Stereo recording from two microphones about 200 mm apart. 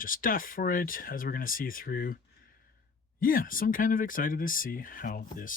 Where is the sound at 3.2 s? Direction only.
45° left (ahead or behind).